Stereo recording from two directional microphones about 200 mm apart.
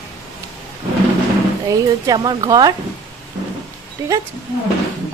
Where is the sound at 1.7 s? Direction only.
20° right (ahead or behind).